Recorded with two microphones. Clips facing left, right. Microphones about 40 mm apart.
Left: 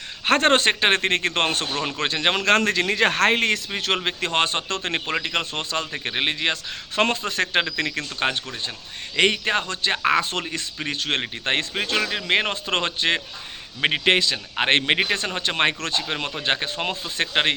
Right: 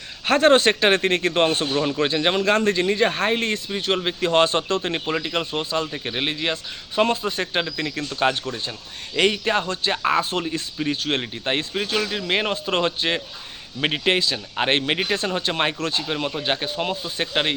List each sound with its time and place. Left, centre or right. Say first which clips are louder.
0.3 s a man's voice: right 2 dB; left
4.0 s a man's voice: right 4 dB; left
5.9 s speech: left 1 dB; left
6.3 s speech: left 1 dB; left
7.6 s a man's voice: left 1 dB; left
9.1 s a man's voice: even; left
13.8 s a man's voice: left 1 dB; left
14.1 s a man's voice: left 1 dB; left
14.6 s speech: left 2 dB; left
15.4 s a man's voice: left 1 dB; left